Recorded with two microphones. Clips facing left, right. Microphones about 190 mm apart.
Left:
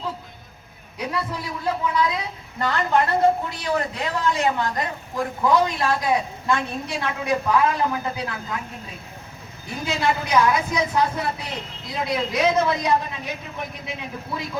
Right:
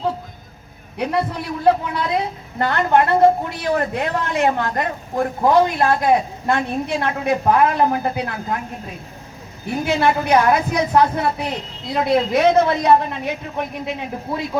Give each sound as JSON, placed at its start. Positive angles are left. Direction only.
{"t": 0.9, "sound": "a woman's voice", "side_deg": -60}
{"t": 9.8, "sound": "a woman's voice", "side_deg": -60}